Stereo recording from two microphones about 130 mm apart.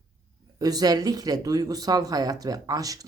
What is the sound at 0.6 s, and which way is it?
Speech, 30° right (ahead or behind).